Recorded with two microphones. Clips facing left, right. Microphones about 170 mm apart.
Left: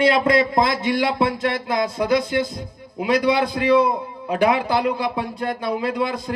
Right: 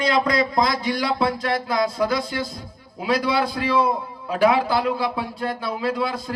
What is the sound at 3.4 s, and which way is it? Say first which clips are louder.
Speech: left 4 dB; centre (ahead or behind).